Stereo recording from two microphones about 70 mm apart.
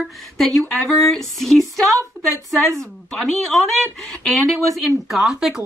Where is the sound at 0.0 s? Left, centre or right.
Centre.